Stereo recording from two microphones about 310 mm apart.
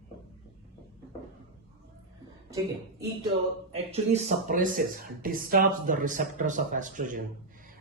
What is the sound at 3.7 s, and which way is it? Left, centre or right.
Speech, right.